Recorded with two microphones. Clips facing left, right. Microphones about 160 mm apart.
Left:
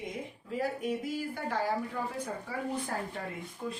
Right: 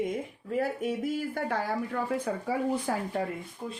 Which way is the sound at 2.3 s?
90° right.